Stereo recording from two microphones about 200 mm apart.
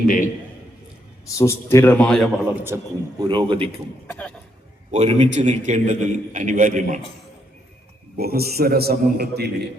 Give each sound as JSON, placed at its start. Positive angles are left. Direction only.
{"t": 1.4, "sound": "a man's voice", "side_deg": 15}
{"t": 2.6, "sound": "a man's voice", "side_deg": -10}
{"t": 3.2, "sound": "a man's voice", "side_deg": -25}
{"t": 4.0, "sound": "a man's voice", "side_deg": 5}
{"t": 4.9, "sound": "a man's voice", "side_deg": -30}
{"t": 8.1, "sound": "a man's voice", "side_deg": -50}